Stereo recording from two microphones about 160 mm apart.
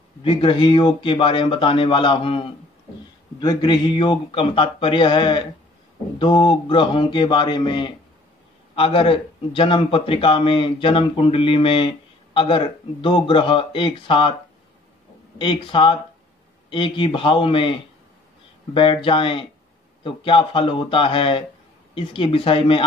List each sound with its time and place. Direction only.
0.2 s a man's voice: 35° left (ahead or behind)
15.3 s a man's voice: 30° left (ahead or behind)